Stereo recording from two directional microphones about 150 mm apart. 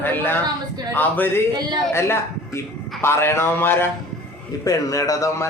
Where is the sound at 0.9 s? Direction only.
10° left (ahead or behind).